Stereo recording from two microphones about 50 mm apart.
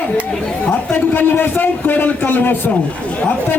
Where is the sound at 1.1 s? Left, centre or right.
Left.